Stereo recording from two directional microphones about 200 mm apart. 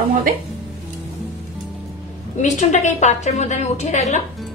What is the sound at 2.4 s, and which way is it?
A woman's voice, 35° left (ahead or behind).